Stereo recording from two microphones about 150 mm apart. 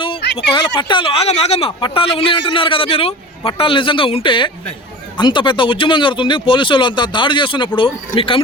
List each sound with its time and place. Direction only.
0.3 s speech: 35° left (ahead or behind)